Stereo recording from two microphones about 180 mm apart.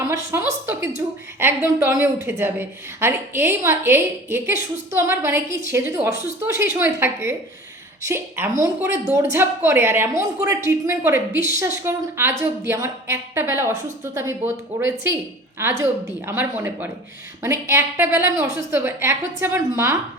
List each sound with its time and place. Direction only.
0.1 s a woman's voice: 15° right (ahead or behind)